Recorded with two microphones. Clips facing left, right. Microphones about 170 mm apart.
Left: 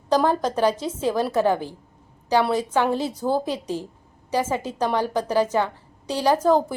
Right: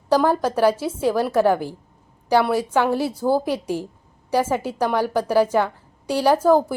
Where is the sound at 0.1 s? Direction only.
10° right (ahead or behind).